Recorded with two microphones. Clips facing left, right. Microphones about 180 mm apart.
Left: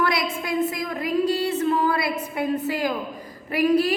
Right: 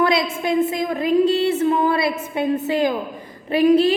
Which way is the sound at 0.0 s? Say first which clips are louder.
Right 5 dB; 25° right (ahead or behind).